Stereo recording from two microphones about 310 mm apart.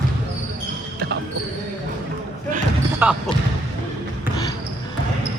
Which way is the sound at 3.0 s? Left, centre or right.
Centre.